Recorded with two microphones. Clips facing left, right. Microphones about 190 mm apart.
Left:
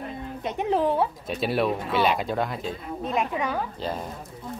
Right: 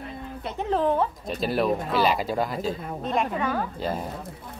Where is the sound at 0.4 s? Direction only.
15° left (ahead or behind); by 2.7 s centre (ahead or behind).